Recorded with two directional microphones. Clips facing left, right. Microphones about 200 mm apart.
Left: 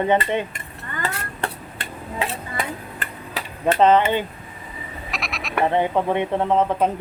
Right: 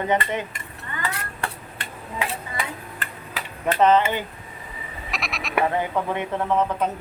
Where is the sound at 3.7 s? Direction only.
25° left (ahead or behind).